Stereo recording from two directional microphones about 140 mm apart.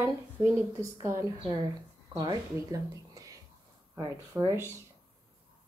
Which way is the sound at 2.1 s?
25° right (ahead or behind).